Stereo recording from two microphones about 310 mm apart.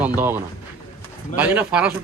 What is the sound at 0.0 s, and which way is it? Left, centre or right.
A man's voice, centre.